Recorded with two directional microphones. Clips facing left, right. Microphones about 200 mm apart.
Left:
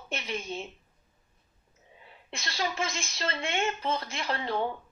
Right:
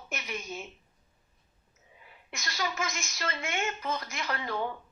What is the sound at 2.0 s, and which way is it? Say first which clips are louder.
Speech: left 2 dB; 30° left (ahead or behind).